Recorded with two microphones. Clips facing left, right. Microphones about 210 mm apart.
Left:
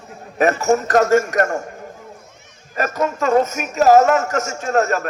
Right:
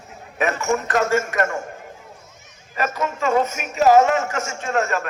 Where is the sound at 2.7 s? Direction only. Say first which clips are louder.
Left 4 dB; 45° left (ahead or behind).